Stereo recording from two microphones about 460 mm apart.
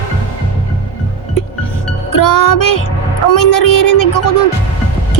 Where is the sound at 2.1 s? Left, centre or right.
Left.